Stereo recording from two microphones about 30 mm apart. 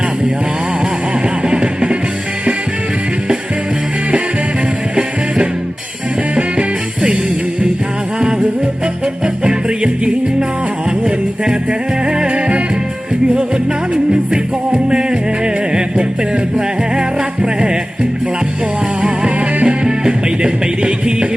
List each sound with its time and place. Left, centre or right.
1.5 s music: right
8.2 s music: right
9.5 s music: right
12.0 s music: right
14.7 s music: right
19.6 s music: right